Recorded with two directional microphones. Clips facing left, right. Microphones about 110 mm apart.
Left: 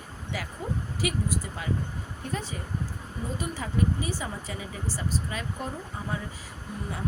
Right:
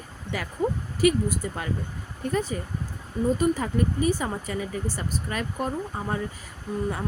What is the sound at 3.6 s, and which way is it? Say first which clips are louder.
Speech: right 4 dB; 50° right (ahead or behind).